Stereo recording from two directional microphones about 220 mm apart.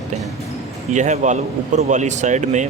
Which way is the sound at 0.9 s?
35° right (ahead or behind).